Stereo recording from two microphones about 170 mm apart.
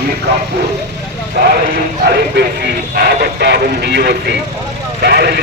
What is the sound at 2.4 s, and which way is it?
Speech, 75° right (ahead or behind).